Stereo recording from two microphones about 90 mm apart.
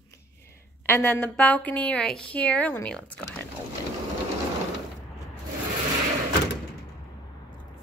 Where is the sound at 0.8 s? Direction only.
25° left (ahead or behind).